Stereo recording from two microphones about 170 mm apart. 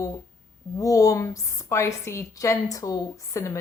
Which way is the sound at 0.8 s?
20° left (ahead or behind).